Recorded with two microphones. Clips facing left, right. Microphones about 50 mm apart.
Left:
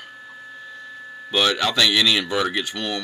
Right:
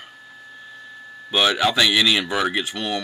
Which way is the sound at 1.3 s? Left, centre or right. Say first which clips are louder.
Right 2 dB; centre.